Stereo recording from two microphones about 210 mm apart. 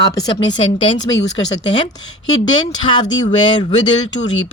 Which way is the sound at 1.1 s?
55° left (ahead or behind).